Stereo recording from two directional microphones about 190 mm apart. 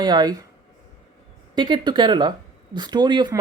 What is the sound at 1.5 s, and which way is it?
Speech, 25° right (ahead or behind).